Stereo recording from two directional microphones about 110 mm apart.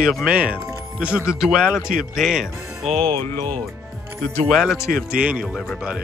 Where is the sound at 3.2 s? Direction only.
20° left (ahead or behind).